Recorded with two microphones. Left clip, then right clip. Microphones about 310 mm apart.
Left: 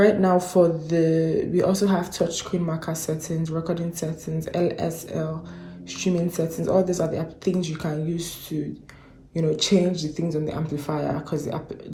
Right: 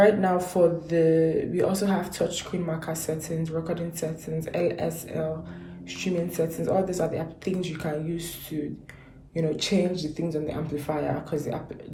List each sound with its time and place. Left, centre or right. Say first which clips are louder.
0.0 s a woman's voice: left 2 dB; centre
0.9 s mantra: even; left
1.5 s a woman's voice: left 4 dB; centre